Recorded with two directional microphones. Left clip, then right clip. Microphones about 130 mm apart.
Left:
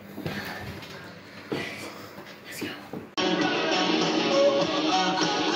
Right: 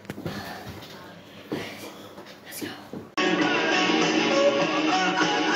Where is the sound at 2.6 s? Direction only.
25° right (ahead or behind).